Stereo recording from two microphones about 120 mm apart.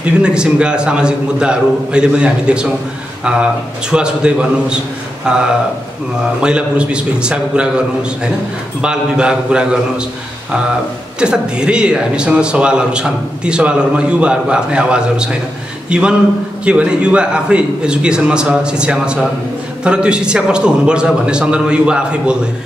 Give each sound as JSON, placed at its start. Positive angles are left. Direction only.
{"t": 0.0, "sound": "a man's voice", "side_deg": -10}
{"t": 3.9, "sound": "a man's voice", "side_deg": -5}
{"t": 11.1, "sound": "a man's voice", "side_deg": -10}